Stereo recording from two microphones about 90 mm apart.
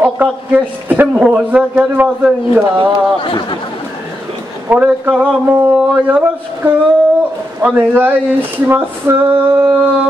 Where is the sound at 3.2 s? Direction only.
65° left (ahead or behind).